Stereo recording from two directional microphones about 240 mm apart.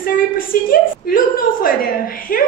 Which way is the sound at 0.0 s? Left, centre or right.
Left.